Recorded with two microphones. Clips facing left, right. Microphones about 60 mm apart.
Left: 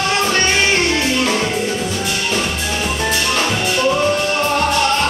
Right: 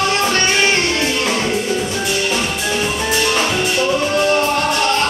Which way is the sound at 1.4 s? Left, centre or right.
Centre.